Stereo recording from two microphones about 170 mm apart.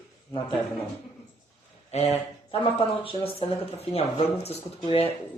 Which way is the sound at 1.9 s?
40° left (ahead or behind).